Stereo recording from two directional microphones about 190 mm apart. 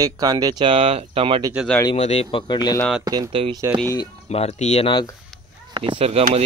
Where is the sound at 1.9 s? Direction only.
35° left (ahead or behind).